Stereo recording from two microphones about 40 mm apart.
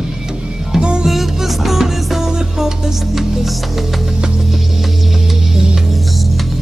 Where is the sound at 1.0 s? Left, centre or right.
Centre.